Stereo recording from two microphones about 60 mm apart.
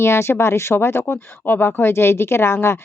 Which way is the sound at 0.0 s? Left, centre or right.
Left.